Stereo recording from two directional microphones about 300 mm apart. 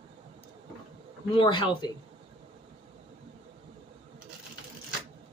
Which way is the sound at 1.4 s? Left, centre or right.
Centre.